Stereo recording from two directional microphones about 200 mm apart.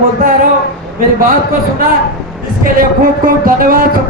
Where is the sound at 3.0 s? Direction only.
45° right (ahead or behind).